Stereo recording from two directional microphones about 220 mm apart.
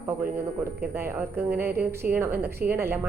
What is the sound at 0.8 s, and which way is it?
A woman's voice, 10° right (ahead or behind).